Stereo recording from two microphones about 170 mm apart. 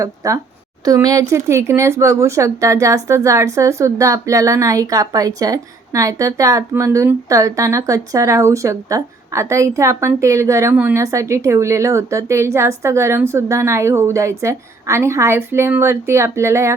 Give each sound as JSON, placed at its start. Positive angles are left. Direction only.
{"t": 0.0, "sound": "a woman's voice", "side_deg": -20}